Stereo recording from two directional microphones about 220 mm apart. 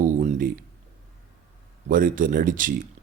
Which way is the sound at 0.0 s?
35° right (ahead or behind).